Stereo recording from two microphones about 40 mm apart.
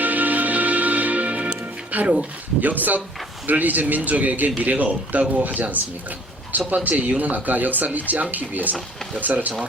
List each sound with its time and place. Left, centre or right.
0.0 s music: right
1.9 s speech: right